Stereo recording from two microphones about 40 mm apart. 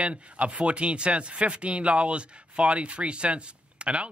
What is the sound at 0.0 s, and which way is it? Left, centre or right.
Speech, right.